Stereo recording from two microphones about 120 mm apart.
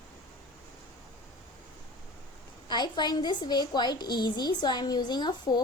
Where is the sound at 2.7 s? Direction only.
35° left (ahead or behind).